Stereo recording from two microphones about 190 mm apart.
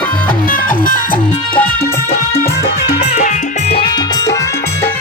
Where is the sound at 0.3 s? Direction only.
45° left (ahead or behind).